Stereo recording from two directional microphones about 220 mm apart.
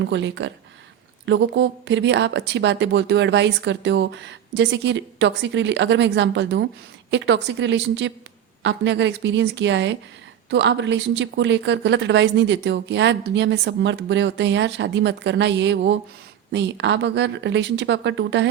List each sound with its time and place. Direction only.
0.1 s a woman's voice: 55° right (ahead or behind)